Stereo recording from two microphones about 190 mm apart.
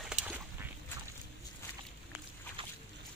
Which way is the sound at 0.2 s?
40° right (ahead or behind).